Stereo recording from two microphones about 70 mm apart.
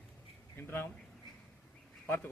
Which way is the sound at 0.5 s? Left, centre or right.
Left.